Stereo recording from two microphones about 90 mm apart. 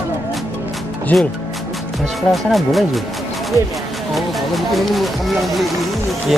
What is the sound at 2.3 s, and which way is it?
Speech, centre (ahead or behind).